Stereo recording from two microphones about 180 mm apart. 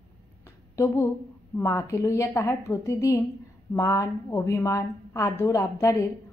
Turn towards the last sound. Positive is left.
turn(degrees=20)  # may be behind; listen again after turning